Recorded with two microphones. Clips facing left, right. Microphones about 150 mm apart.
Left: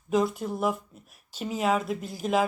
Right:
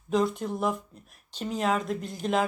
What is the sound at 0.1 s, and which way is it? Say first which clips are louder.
Speech: left 1 dB; 5° left (ahead or behind).